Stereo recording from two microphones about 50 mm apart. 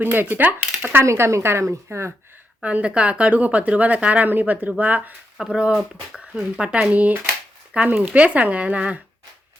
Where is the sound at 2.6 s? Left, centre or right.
Right.